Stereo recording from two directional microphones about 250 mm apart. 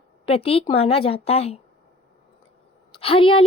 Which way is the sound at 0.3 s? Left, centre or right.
Left.